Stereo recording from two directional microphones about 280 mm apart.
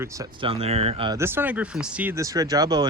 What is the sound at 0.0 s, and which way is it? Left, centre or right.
Speech, centre.